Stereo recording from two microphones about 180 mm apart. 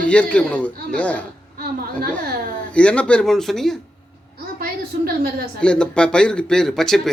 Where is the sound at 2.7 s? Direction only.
5° left (ahead or behind).